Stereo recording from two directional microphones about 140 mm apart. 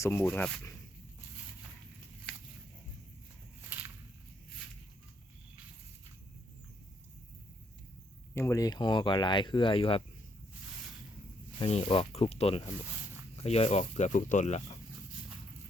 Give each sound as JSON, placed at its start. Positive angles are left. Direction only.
{"t": 0.0, "sound": "speech", "side_deg": 20}
{"t": 3.7, "sound": "a sound", "side_deg": -10}
{"t": 8.4, "sound": "speech", "side_deg": 20}
{"t": 11.6, "sound": "speech", "side_deg": 40}